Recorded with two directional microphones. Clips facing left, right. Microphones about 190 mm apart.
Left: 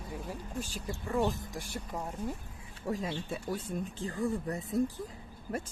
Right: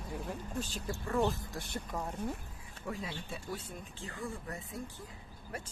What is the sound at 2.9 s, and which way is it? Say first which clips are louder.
Speech: left 6 dB; 40° left (ahead or behind).